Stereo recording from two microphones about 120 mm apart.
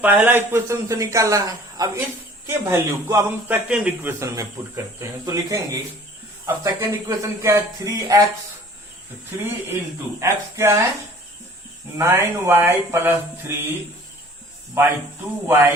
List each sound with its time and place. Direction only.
0.0 s a man's voice: 15° right (ahead or behind)
4.2 s a man's voice: 25° right (ahead or behind)
9.4 s a man's voice: 20° right (ahead or behind)
11.9 s a man's voice: 20° right (ahead or behind)
14.8 s a man's voice: 20° right (ahead or behind)